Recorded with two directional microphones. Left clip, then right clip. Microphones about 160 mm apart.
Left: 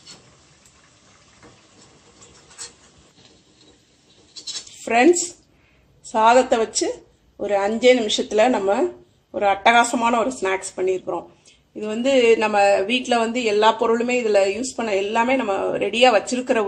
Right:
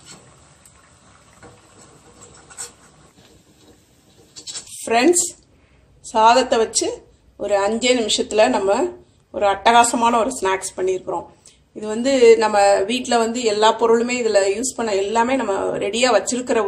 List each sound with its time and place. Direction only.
4.9 s speech: 30° left (ahead or behind)
6.1 s speech: 35° left (ahead or behind)